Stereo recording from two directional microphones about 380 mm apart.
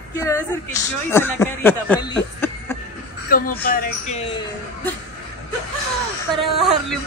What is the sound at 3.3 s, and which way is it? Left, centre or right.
Speech, left.